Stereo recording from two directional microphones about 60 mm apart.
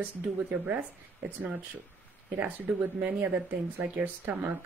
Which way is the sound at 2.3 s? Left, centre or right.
Right.